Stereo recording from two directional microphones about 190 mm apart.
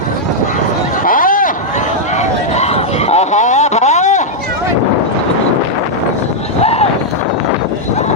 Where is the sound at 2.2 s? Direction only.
35° left (ahead or behind).